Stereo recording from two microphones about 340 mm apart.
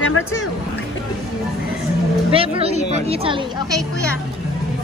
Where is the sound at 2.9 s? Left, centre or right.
Centre.